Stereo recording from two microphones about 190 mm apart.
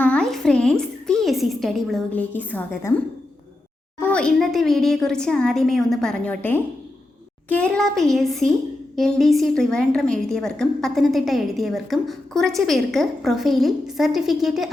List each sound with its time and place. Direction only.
0.0 s a woman's voice: 5° left (ahead or behind)
4.1 s a woman's voice: 5° left (ahead or behind)